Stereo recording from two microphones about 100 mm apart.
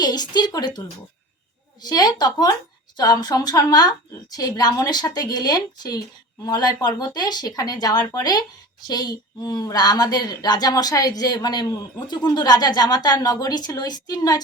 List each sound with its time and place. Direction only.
0.0 s speech: 45° left (ahead or behind)